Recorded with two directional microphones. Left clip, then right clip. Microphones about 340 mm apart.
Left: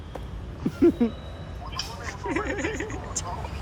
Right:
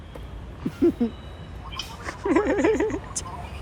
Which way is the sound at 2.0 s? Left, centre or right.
Centre.